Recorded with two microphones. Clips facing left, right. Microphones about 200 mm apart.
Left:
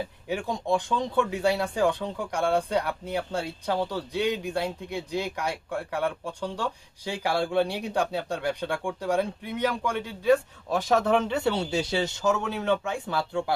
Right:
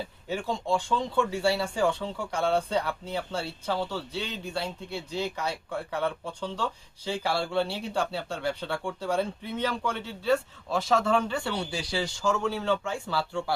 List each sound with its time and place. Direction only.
0.3 s speech: 15° left (ahead or behind)